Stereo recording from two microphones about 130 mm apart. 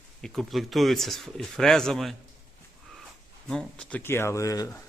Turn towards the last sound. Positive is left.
turn(degrees=25)  # may be behind; listen again after turning